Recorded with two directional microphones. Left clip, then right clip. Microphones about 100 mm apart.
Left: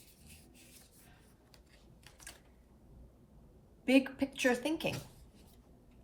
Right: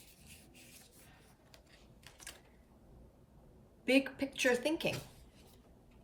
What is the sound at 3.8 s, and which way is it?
A woman's voice, 25° left (ahead or behind).